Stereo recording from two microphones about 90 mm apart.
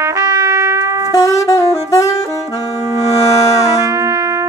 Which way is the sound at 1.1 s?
35° left (ahead or behind).